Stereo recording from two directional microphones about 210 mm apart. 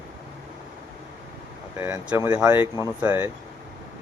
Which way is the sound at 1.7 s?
10° right (ahead or behind).